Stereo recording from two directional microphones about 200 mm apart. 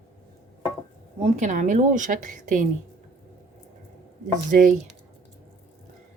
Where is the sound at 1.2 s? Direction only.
40° right (ahead or behind).